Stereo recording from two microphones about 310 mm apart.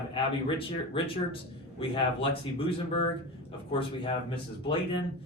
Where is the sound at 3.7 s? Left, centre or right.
Centre.